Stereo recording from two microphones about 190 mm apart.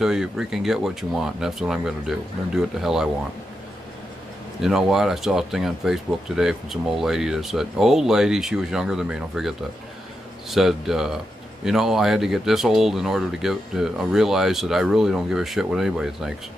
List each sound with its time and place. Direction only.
0.0 s speech: centre (ahead or behind)
4.6 s speech: centre (ahead or behind)